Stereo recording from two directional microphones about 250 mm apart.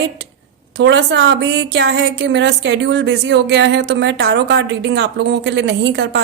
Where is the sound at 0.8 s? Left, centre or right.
Right.